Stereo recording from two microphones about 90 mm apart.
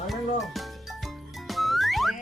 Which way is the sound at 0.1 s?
Centre (ahead or behind).